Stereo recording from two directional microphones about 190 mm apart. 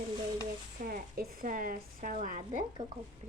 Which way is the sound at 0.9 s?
50° right (ahead or behind).